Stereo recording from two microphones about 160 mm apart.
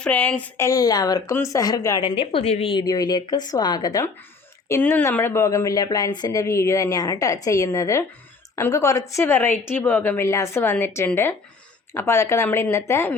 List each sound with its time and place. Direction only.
0.0 s a woman's voice: 5° left (ahead or behind)
2.0 s a woman's voice: 40° left (ahead or behind)
2.8 s a woman's voice: 25° left (ahead or behind)